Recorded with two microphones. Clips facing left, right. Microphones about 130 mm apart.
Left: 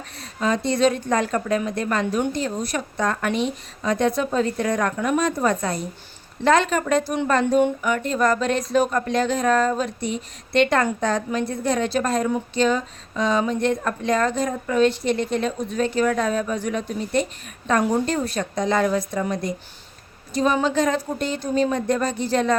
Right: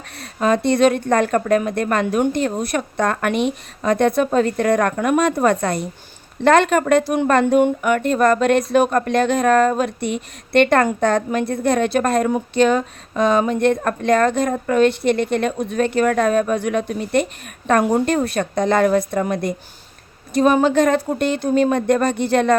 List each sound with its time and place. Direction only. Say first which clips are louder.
0.2 s a woman's voice: right 5 dB; 55° right (ahead or behind)